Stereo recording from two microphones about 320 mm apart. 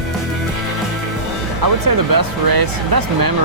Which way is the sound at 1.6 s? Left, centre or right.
Right.